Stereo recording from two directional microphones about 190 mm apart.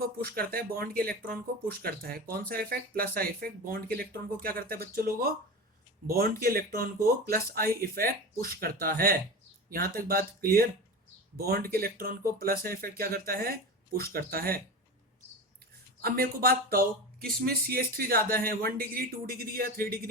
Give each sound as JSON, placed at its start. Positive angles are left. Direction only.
{"t": 0.0, "sound": "speech", "side_deg": -50}
{"t": 16.0, "sound": "speech", "side_deg": -50}